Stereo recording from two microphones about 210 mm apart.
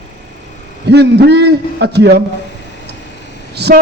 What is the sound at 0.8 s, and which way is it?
A man's voice, 50° right (ahead or behind).